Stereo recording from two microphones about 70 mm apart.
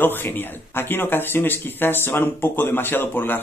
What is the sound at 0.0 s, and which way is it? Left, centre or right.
Speech, left.